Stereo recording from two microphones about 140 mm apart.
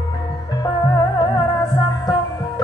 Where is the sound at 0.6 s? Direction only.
30° left (ahead or behind).